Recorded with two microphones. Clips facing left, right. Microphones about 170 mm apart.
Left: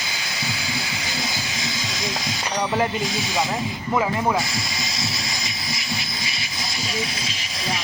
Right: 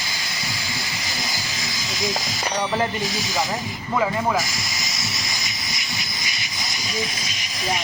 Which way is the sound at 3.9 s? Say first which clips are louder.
Even; 10° left (ahead or behind).